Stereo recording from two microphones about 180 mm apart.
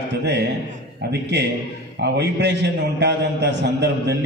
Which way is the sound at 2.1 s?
70° right (ahead or behind).